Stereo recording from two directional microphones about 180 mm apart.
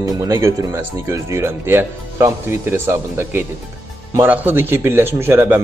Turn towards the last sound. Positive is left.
turn(degrees=-10)  # may be behind; listen again after turning